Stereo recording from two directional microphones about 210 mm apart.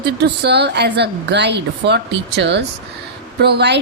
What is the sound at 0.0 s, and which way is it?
A woman's voice, 50° right (ahead or behind).